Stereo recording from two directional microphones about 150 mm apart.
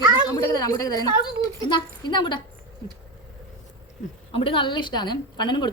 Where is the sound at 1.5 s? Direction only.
30° left (ahead or behind).